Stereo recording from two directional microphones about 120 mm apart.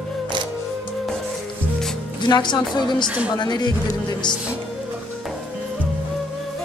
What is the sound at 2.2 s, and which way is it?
A woman's voice, 35° left (ahead or behind).